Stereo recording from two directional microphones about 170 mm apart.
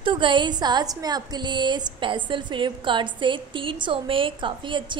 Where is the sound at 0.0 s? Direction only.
30° right (ahead or behind).